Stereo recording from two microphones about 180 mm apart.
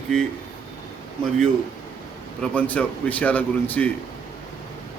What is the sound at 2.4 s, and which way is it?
Speech, 5° left (ahead or behind).